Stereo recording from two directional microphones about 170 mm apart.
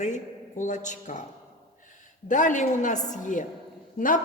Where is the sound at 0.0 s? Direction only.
45° left (ahead or behind).